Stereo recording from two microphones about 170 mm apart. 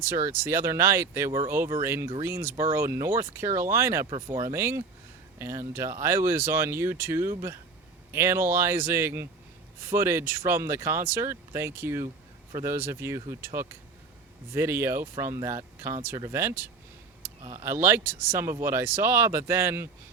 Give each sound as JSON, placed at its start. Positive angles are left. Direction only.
{"t": 0.0, "sound": "speech", "side_deg": -15}